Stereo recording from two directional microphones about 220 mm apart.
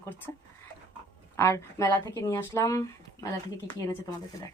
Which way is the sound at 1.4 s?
15° left (ahead or behind).